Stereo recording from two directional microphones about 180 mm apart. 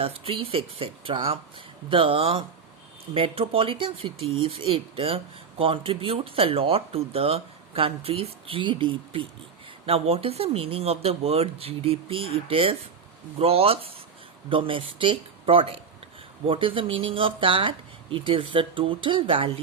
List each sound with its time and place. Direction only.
0.0 s speech: 30° right (ahead or behind)